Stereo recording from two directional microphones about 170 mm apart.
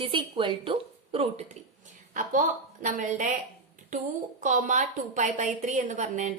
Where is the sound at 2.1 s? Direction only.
50° right (ahead or behind).